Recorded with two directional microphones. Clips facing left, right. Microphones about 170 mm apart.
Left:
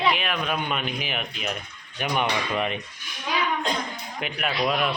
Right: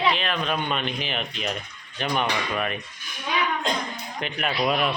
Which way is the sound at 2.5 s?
20° left (ahead or behind).